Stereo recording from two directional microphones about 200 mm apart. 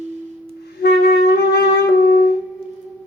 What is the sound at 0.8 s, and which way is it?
Wind instrument, 55° left (ahead or behind).